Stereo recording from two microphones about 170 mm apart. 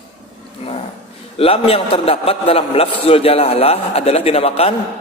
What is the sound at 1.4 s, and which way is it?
A man's voice, 35° left (ahead or behind).